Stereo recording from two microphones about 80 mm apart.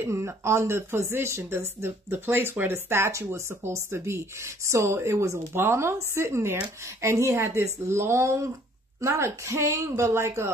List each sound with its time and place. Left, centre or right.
0.0 s speech: right